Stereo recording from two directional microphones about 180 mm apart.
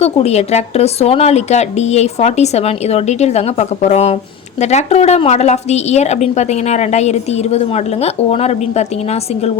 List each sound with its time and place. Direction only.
0.0 s a woman's voice: 35° left (ahead or behind)